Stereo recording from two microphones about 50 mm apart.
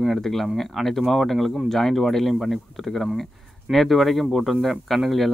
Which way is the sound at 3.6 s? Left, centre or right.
Centre.